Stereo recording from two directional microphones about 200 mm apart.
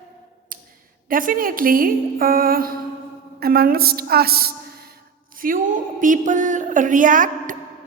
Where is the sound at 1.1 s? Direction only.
45° right (ahead or behind).